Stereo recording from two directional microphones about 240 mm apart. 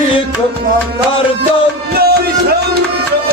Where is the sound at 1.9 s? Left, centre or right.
Right.